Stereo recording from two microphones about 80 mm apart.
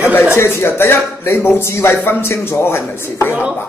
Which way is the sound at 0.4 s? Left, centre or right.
Left.